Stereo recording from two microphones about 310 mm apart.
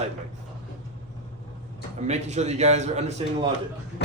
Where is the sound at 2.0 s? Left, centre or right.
Right.